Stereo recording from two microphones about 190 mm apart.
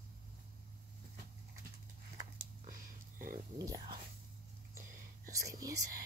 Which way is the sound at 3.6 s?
15° right (ahead or behind).